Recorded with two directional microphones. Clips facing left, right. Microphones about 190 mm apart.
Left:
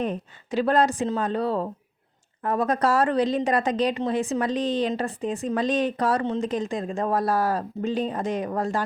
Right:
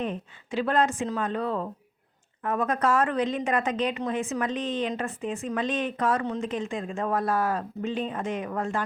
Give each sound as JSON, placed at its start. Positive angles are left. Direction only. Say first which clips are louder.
{"t": 0.0, "sound": "a woman's voice", "louder": "left 3 dB", "side_deg": 40}